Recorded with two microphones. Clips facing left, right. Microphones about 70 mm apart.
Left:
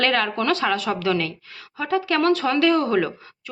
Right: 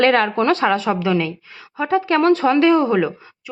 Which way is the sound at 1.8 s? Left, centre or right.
Right.